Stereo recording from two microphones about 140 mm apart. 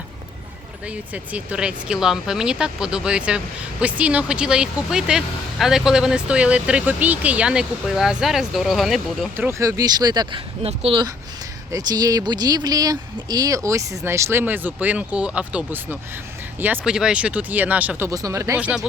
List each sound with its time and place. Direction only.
0.9 s speech: 10° right (ahead or behind)
9.3 s speech: 15° right (ahead or behind)
10.6 s speech: 45° right (ahead or behind)
11.7 s speech: 30° right (ahead or behind); by 18.1 s 10° right (ahead or behind)
18.1 s speech: 25° right (ahead or behind)
18.5 s speech: 5° right (ahead or behind)